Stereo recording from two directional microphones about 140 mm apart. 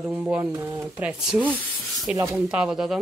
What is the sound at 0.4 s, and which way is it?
Speech, 25° right (ahead or behind).